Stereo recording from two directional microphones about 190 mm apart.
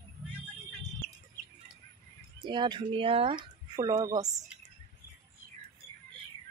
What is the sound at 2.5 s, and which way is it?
Speech, 25° right (ahead or behind).